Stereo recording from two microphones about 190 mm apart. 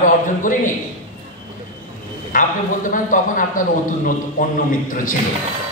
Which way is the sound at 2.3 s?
45° left (ahead or behind).